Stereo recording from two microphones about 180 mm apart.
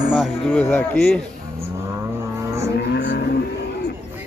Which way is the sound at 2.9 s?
65° left (ahead or behind).